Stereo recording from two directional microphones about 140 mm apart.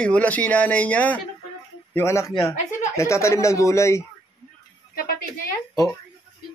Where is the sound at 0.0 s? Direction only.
10° left (ahead or behind).